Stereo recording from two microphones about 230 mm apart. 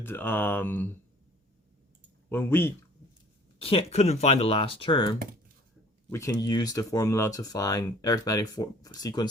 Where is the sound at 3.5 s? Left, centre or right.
Left.